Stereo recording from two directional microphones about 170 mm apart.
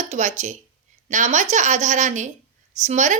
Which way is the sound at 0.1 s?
45° right (ahead or behind).